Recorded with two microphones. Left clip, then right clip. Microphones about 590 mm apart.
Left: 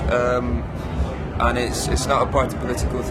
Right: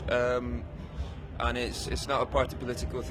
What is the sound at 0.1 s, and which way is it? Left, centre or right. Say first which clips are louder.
Music: left 7 dB; right.